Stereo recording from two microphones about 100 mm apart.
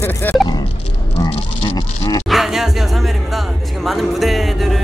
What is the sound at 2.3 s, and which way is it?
Music, centre (ahead or behind).